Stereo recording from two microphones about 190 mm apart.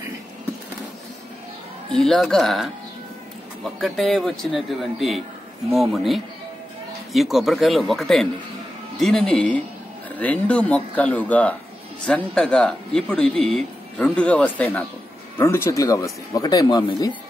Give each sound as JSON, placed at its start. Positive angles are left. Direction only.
{"t": 1.9, "sound": "speech", "side_deg": 0}
{"t": 3.8, "sound": "speech", "side_deg": 0}